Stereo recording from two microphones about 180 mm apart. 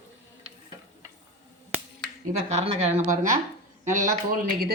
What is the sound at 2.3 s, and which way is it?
Speech, 40° right (ahead or behind).